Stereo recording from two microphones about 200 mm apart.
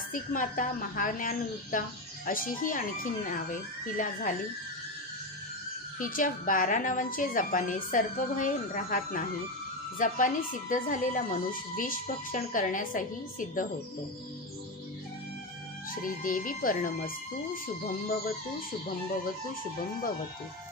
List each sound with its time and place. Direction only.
0.1 s speech: 40° left (ahead or behind)
5.9 s speech: 45° left (ahead or behind)
15.9 s speech: 45° left (ahead or behind)